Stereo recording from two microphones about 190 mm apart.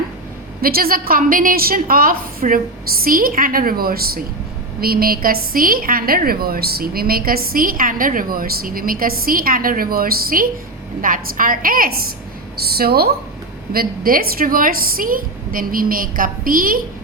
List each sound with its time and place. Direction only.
0.6 s a woman's voice: 50° right (ahead or behind)